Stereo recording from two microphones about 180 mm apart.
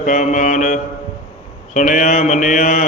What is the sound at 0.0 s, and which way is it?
Mantra, 45° left (ahead or behind).